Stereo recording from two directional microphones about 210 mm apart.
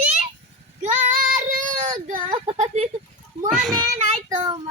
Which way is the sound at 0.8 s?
35° right (ahead or behind).